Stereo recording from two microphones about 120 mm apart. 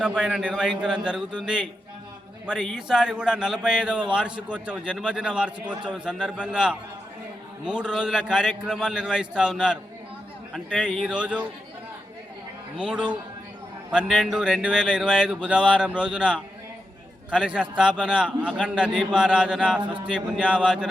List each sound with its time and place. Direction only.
0.0 s a man's voice: 5° right (ahead or behind)
10.5 s a man's voice: 10° left (ahead or behind)
10.8 s a man's voice: 5° right (ahead or behind)
12.7 s a man's voice: 5° right (ahead or behind)
18.3 s a man's voice: 5° left (ahead or behind)
18.7 s a man's voice: 5° right (ahead or behind)